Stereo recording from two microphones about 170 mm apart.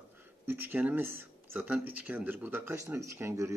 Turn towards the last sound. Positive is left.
turn(degrees=-15)  # may be behind; listen again after turning